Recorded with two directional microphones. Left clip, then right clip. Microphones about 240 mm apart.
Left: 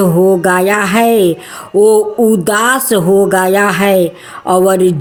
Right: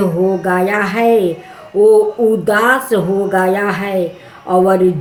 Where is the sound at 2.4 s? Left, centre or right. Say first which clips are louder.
Left 1 dB; left.